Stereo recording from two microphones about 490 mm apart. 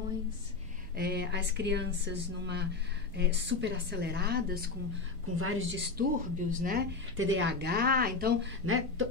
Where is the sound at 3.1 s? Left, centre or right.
Right.